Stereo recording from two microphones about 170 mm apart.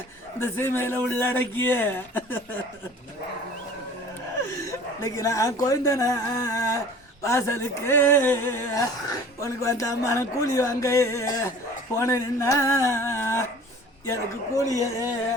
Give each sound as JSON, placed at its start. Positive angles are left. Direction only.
{"t": 0.3, "sound": "speech", "side_deg": 15}
{"t": 4.6, "sound": "a man's voice", "side_deg": 20}